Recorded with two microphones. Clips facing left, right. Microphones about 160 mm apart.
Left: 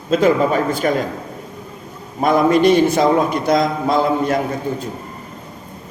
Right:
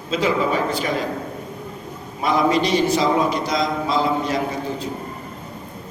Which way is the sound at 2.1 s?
50° left (ahead or behind).